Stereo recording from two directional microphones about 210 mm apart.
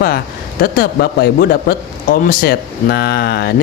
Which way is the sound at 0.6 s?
45° left (ahead or behind).